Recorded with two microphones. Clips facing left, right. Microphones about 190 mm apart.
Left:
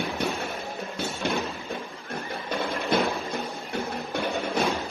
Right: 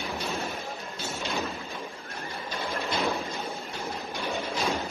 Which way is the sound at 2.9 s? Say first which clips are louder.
Left 5 dB; 55° left (ahead or behind).